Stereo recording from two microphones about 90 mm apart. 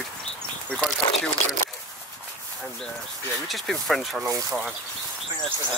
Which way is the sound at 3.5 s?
Centre (ahead or behind).